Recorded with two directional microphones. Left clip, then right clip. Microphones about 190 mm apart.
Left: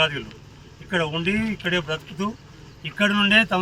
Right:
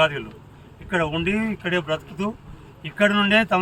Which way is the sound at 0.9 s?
Centre (ahead or behind).